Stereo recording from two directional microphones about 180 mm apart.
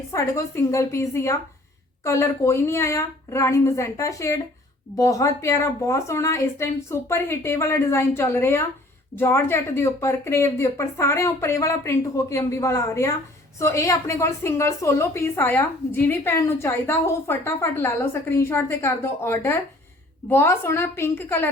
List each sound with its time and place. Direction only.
0.1 s a woman's voice: 15° left (ahead or behind)